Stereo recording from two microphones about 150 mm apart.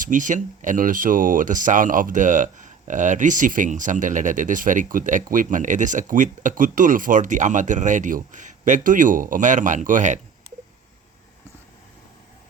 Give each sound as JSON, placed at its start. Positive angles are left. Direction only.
{"t": 0.0, "sound": "speech", "side_deg": -60}